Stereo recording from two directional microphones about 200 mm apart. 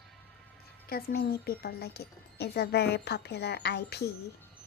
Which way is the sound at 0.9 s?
50° left (ahead or behind).